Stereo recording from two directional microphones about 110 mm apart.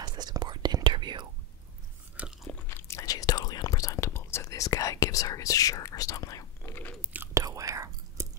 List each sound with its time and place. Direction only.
0.0 s whispering: 40° right (ahead or behind)
2.1 s biting: 5° right (ahead or behind)
2.7 s whispering: 25° left (ahead or behind)
6.7 s chewing: 20° left (ahead or behind)
7.0 s chewing: 15° right (ahead or behind)
7.3 s whispering: 30° right (ahead or behind)